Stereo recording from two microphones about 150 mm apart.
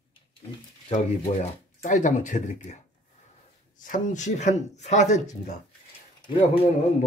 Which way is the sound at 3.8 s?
60° left (ahead or behind).